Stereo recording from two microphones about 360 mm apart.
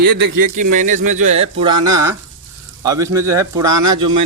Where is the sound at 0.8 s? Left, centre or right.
Right.